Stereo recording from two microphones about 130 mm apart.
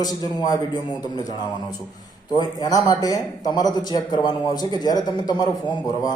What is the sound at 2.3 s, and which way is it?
A man's voice, 30° left (ahead or behind).